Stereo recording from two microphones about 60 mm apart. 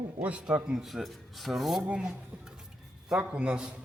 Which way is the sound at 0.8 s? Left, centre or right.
Centre.